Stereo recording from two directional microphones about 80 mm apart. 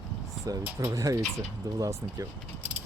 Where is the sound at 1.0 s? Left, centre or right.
Right.